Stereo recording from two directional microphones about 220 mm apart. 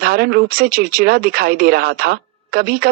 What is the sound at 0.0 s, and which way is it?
Speech, 45° right (ahead or behind).